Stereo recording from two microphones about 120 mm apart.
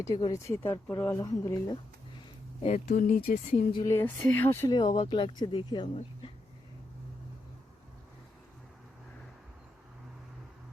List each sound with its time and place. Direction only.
0.0 s speech: 35° left (ahead or behind)
0.3 s speech: 20° left (ahead or behind)
1.1 s speech: 30° left (ahead or behind)
2.6 s speech: 85° left
3.2 s speech: 60° left (ahead or behind)
3.8 s speech: 20° left (ahead or behind)
5.0 s speech: 40° left (ahead or behind)